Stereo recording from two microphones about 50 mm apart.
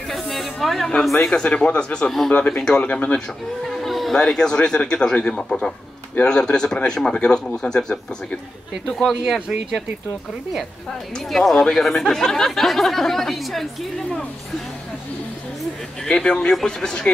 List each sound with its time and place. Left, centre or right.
0.1 s snake: centre
1.1 s speech: centre
1.4 s speech: left
2.3 s speech: left
3.6 s chatter: centre
4.1 s speech: centre
8.9 s speech: centre
9.5 s speech: centre
11.2 s speech: centre
16.1 s speech: centre